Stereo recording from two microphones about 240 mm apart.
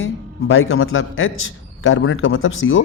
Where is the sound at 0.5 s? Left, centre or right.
Left.